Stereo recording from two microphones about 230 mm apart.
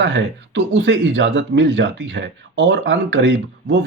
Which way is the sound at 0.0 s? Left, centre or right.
Right.